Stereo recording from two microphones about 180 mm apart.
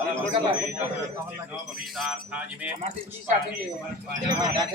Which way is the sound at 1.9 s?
5° right (ahead or behind).